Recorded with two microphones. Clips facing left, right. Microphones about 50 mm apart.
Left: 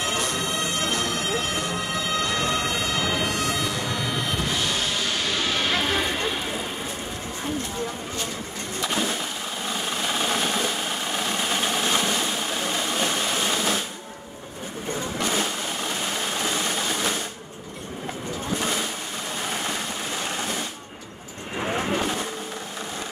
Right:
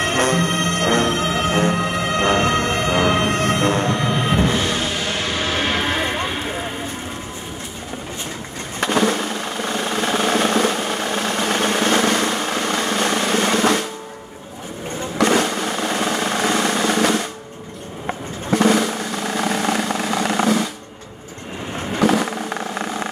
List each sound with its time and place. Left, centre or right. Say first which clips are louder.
0.0 s music: right 8 dB; right
5.5 s a sound: right 4 dB; right
8.8 s vehicle: right 9 dB; right
9.7 s drum: right 6 dB; right
11.2 s vehicle: right 6 dB; right
15.1 s vehicle: right 11 dB; right
18.5 s drum: right 12 dB; right
19.3 s a sound: right 9 dB; right
22.0 s a sound: right 10 dB; right